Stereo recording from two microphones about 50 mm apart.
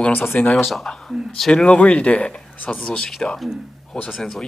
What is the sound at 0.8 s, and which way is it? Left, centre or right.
Speech, centre.